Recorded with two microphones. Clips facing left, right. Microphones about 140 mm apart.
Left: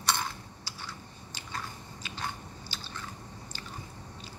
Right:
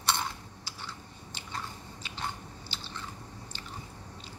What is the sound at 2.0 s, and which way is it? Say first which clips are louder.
Biting: even; 25° right (ahead or behind).